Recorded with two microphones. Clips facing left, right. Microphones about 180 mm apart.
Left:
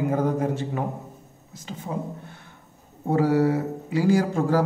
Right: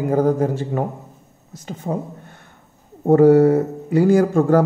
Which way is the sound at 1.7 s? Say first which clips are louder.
Right 5 dB; 50° right (ahead or behind).